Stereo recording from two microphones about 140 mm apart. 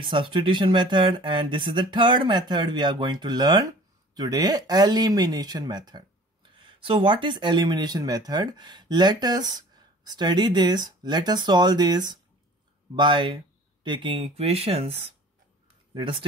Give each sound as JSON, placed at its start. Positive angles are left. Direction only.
{"t": 0.0, "sound": "speech", "side_deg": -35}